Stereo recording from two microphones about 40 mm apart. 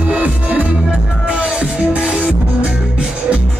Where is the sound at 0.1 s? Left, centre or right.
Right.